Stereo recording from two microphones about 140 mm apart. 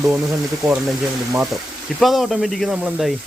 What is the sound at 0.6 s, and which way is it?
Speech, 5° right (ahead or behind).